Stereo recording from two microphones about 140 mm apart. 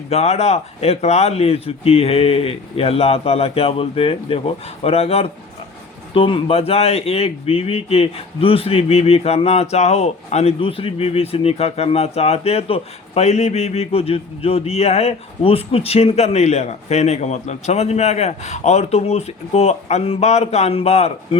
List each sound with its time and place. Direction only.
0.1 s speech: 50° left (ahead or behind)